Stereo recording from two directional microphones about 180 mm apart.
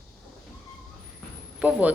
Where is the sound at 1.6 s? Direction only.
5° right (ahead or behind).